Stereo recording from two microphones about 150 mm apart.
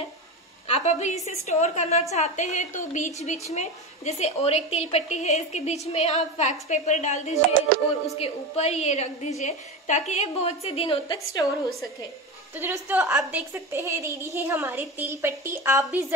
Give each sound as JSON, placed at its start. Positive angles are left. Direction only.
{"t": 0.7, "sound": "a woman's voice", "side_deg": 50}
{"t": 12.5, "sound": "a woman's voice", "side_deg": -15}